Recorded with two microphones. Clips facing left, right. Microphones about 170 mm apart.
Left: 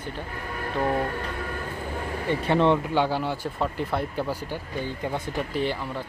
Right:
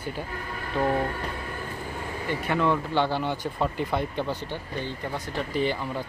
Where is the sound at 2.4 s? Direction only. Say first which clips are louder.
Left 4 dB; 25° left (ahead or behind).